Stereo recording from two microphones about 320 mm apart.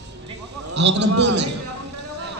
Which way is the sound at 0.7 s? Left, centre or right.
Right.